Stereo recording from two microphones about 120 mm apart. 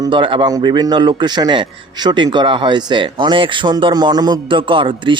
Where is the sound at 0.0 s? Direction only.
45° right (ahead or behind).